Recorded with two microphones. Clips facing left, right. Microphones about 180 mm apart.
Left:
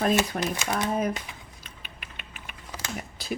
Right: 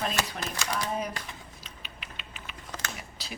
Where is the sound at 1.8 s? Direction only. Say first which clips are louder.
Even; 50° left (ahead or behind).